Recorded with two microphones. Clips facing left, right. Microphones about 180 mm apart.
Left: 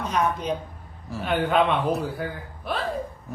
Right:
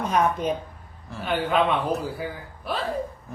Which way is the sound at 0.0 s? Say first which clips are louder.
Right 2 dB; 50° right (ahead or behind).